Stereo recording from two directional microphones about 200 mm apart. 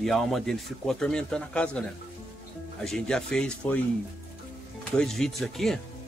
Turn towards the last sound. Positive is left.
turn(degrees=0)  # may be behind; listen again after turning